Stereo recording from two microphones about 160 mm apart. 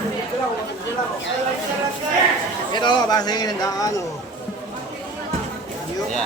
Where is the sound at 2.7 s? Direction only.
25° left (ahead or behind).